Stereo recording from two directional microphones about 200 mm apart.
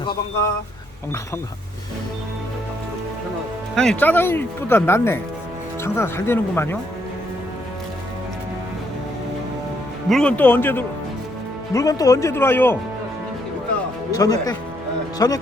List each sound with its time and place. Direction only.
3.8 s speech: 5° left (ahead or behind)
10.1 s speech: 5° left (ahead or behind)
14.1 s speech: 20° left (ahead or behind)